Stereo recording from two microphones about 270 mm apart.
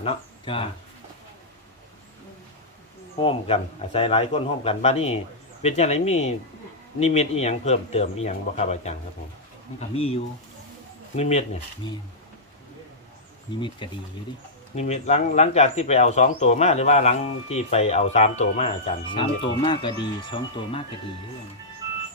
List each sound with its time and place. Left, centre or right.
0.0 s speech: left
3.2 s speech: left
9.9 s speech: left
11.2 s speech: left
13.6 s speech: centre